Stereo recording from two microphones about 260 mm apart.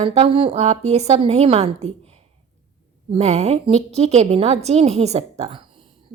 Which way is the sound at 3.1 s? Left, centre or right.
Right.